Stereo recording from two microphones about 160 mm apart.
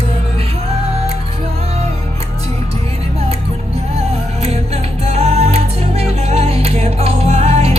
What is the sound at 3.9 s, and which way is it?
Music, 40° right (ahead or behind).